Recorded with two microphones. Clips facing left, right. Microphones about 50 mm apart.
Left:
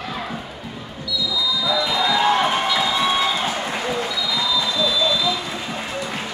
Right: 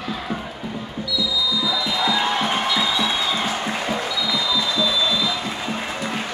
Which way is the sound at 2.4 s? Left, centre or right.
Left.